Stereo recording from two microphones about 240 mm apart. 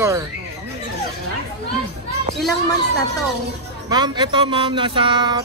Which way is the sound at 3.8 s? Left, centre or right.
Centre.